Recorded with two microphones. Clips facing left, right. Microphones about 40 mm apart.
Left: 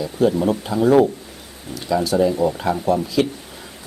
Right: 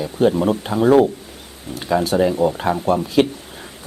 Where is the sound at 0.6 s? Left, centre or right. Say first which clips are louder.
Right 1 dB; right.